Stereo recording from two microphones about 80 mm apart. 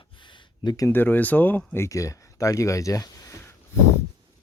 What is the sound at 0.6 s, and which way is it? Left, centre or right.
Speech, left.